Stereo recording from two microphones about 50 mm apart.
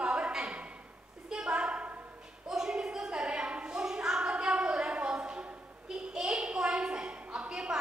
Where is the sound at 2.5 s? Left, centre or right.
Centre.